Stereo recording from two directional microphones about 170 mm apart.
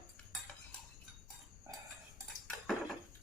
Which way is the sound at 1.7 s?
20° right (ahead or behind).